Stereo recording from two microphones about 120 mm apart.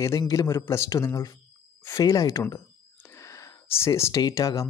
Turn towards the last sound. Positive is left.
turn(degrees=25)  # may be behind; listen again after turning